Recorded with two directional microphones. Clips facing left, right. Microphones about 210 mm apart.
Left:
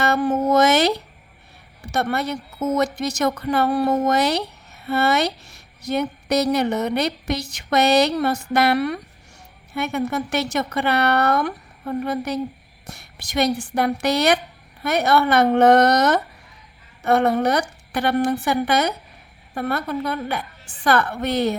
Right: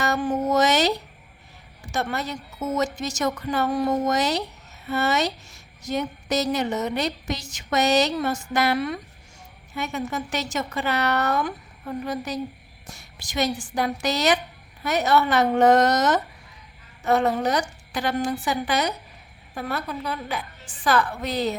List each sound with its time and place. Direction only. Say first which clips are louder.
0.0 s speech: left 4 dB; 65° left (ahead or behind)